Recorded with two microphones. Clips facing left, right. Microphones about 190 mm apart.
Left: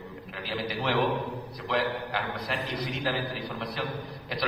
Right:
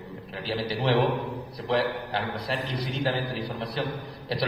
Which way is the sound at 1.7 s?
30° right (ahead or behind).